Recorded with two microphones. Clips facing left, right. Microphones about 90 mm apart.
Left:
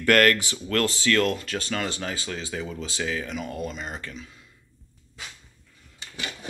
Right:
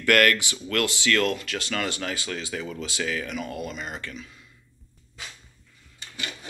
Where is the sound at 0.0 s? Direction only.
35° left (ahead or behind).